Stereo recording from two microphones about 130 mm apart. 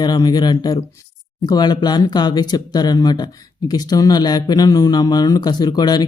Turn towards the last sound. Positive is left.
turn(degrees=30)  # may be behind; listen again after turning